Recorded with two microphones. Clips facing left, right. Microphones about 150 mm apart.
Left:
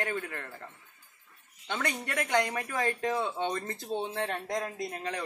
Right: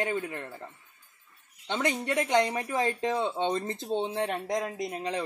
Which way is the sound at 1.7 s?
20° right (ahead or behind).